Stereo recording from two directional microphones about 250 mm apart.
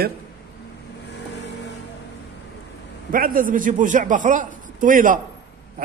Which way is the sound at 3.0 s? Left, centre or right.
Right.